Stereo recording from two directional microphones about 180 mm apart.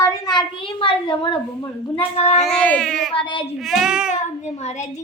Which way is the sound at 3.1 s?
30° left (ahead or behind).